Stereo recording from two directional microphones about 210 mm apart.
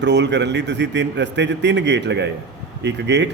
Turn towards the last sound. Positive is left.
turn(degrees=-55)  # may be behind; listen again after turning